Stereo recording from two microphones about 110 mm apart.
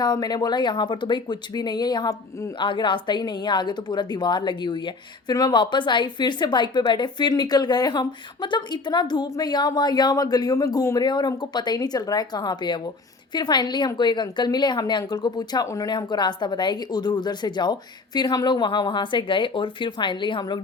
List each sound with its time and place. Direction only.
0.0 s speech: 40° left (ahead or behind)
2.6 s speech: 45° left (ahead or behind); by 15.9 s 30° left (ahead or behind)
15.9 s speech: 40° left (ahead or behind)